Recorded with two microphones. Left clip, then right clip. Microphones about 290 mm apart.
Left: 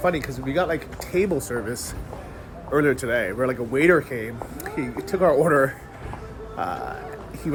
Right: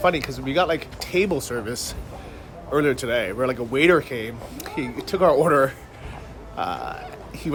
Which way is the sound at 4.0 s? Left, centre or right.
Centre.